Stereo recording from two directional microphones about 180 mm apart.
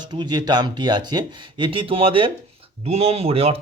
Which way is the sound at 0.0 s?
25° right (ahead or behind).